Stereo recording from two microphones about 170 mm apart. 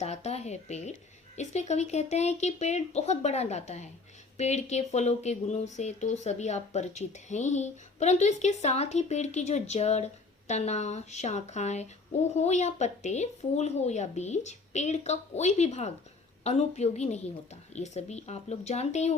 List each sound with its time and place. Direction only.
0.0 s speech: 40° left (ahead or behind)